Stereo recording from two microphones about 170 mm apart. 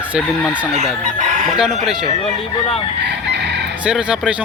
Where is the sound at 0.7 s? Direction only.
45° right (ahead or behind).